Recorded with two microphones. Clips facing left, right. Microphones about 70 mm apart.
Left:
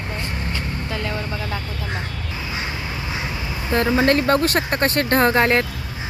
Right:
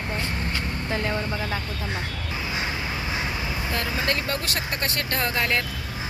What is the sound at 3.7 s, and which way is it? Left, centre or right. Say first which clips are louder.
Speech: left 11 dB; left.